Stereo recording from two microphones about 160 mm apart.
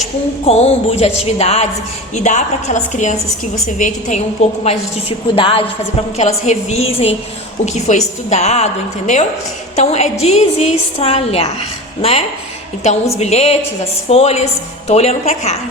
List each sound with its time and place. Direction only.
0.4 s music: 40° left (ahead or behind)
2.1 s a woman's voice: 50° left (ahead or behind)
4.6 s music: 40° left (ahead or behind)
6.1 s a woman's voice: 45° left (ahead or behind)
11.0 s music: 40° left (ahead or behind)
12.8 s a woman's voice: 45° left (ahead or behind)